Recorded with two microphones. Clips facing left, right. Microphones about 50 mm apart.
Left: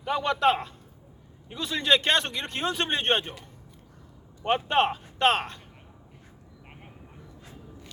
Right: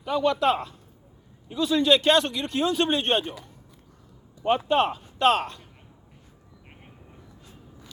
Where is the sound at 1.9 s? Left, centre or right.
Left.